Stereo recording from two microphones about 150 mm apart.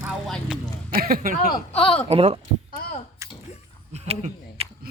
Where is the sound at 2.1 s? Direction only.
45° right (ahead or behind).